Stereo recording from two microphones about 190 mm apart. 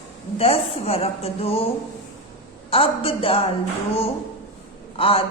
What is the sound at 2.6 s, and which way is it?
Speech, 30° left (ahead or behind).